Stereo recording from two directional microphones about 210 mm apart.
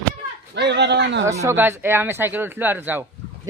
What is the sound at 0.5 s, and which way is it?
Speech, 55° right (ahead or behind).